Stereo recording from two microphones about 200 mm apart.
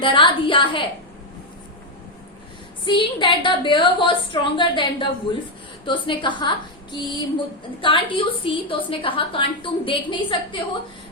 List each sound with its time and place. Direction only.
0.0 s a woman's voice: 25° left (ahead or behind)
2.8 s a woman's voice: 25° left (ahead or behind)